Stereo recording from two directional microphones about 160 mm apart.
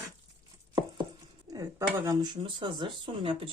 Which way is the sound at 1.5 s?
20° right (ahead or behind).